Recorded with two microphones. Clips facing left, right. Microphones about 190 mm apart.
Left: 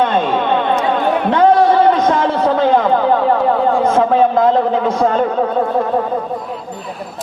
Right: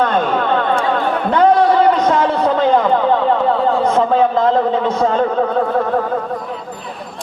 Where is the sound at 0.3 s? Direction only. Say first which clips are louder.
Left 1 dB; 20° left (ahead or behind).